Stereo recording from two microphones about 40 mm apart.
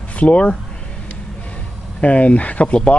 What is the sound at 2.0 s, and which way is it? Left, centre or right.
Speech, left.